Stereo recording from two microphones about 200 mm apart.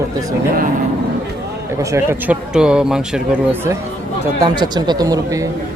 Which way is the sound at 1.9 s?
10° right (ahead or behind).